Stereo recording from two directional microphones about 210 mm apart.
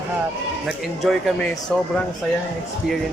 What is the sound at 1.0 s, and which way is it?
Speech, 5° left (ahead or behind).